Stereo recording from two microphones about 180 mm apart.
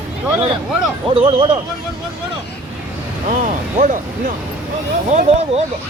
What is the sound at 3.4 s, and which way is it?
Speech, 45° right (ahead or behind).